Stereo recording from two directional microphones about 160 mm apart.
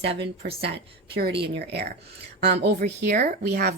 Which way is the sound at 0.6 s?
90° right.